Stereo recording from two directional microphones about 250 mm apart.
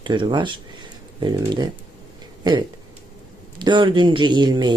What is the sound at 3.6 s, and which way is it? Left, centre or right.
Speech, centre.